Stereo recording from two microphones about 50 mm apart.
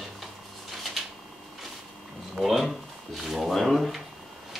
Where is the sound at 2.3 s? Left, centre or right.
Centre.